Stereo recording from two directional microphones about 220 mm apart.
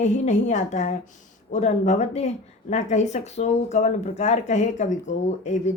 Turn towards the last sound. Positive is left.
turn(degrees=35)  # may be behind; listen again after turning